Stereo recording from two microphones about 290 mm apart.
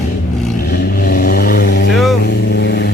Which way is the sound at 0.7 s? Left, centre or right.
Left.